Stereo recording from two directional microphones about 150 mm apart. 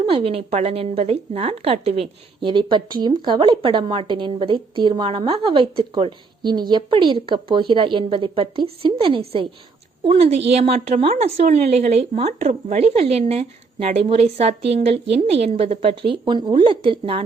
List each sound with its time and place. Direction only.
0.0 s a woman's voice: 40° right (ahead or behind)